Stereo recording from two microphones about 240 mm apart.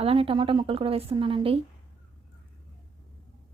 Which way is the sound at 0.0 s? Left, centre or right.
Right.